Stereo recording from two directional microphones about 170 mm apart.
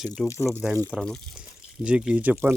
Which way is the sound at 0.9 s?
5° left (ahead or behind).